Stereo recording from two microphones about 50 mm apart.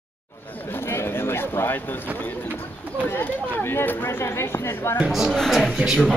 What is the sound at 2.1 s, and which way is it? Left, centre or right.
Speech, left.